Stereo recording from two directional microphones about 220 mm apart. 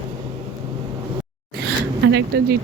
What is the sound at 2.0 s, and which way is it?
Speech, 50° right (ahead or behind).